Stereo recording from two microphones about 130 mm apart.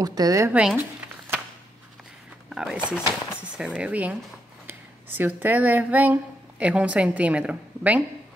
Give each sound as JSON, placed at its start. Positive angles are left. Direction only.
{"t": 0.0, "sound": "speech", "side_deg": -30}
{"t": 0.5, "sound": "a sound", "side_deg": -10}
{"t": 2.5, "sound": "speech", "side_deg": -5}